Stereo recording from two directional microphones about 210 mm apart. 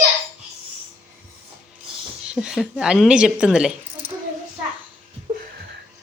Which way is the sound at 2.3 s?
5° right (ahead or behind).